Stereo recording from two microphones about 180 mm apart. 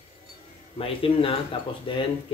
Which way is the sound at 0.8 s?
30° left (ahead or behind).